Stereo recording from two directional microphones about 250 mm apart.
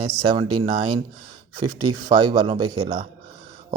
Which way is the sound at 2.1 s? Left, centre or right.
Centre.